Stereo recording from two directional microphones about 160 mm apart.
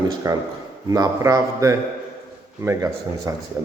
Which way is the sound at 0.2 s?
20° right (ahead or behind).